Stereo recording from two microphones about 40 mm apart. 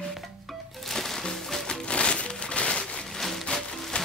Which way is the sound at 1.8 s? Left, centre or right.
Left.